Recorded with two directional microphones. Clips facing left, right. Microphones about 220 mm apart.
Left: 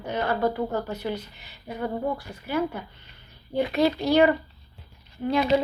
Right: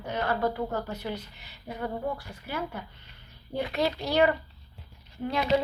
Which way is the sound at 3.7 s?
15° left (ahead or behind).